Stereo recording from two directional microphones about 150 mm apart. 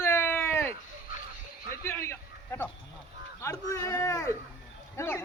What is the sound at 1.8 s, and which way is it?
A man's voice, 15° left (ahead or behind).